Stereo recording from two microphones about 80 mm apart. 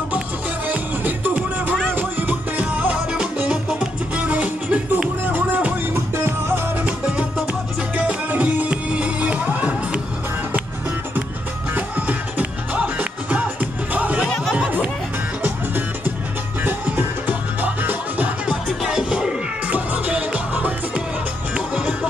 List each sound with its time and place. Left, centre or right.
0.7 s music: right
6.8 s music: centre
11.7 s music: centre
14.2 s a sound: centre
15.4 s music: right